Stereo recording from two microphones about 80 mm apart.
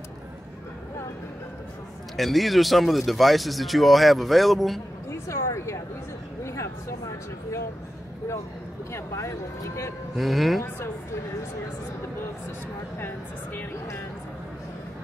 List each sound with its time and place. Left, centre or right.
2.1 s speech: centre
5.1 s a sound: left
8.9 s speech: left
10.1 s speech: centre
13.0 s music: left